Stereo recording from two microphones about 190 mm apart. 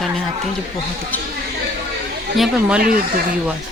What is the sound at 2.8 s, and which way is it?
Speech, 50° right (ahead or behind).